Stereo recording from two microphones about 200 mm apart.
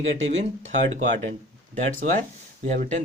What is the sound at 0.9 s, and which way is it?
Speech, 35° right (ahead or behind).